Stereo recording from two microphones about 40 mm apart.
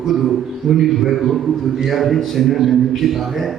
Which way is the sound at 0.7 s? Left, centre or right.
Right.